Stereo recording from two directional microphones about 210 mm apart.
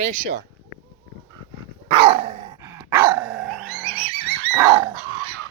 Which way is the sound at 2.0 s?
25° right (ahead or behind).